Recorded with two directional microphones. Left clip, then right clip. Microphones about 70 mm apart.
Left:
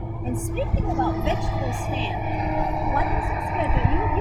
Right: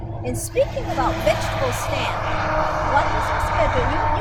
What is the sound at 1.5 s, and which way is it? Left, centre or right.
Speech, centre.